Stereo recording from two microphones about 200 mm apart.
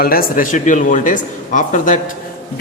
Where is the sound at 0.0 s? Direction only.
45° left (ahead or behind).